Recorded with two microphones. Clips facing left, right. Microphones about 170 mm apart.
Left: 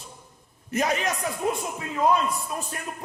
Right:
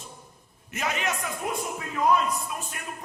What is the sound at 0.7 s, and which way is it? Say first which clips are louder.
Music: left 5 dB; 35° left (ahead or behind).